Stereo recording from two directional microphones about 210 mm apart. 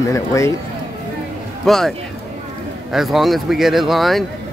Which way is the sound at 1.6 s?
Centre (ahead or behind).